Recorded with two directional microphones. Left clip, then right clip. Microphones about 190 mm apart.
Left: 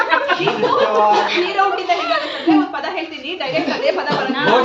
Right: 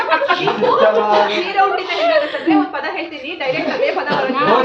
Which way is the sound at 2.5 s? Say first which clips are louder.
Left 1 dB; 10° left (ahead or behind).